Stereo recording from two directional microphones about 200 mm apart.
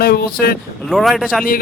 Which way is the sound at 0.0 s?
50° left (ahead or behind).